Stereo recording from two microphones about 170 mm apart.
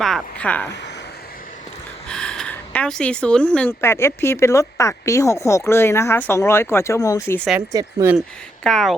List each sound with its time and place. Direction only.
0.0 s speech: 5° left (ahead or behind)
2.0 s speech: 5° left (ahead or behind)
7.7 s speech: 20° right (ahead or behind)
8.6 s speech: centre (ahead or behind)